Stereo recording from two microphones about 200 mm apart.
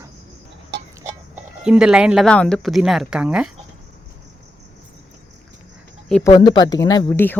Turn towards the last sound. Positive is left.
turn(degrees=15)  # may be behind; listen again after turning